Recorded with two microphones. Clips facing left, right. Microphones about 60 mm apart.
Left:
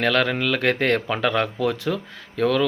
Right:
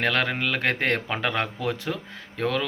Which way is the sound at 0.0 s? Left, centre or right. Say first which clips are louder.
Left 4 dB; right.